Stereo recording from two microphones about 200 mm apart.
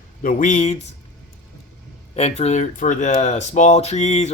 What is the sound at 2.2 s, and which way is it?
Speech, 30° left (ahead or behind).